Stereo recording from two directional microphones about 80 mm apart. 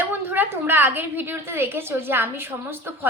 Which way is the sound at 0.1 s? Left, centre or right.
Right.